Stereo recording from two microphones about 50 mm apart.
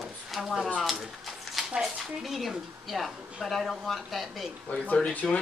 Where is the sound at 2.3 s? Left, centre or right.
Centre.